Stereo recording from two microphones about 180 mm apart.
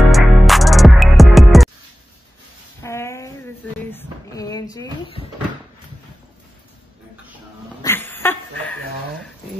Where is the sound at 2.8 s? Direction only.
15° left (ahead or behind).